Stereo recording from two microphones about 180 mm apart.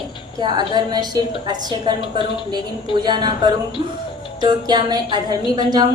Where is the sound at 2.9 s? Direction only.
25° right (ahead or behind).